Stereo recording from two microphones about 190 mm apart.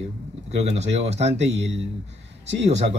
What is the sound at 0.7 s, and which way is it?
Speech, 35° right (ahead or behind).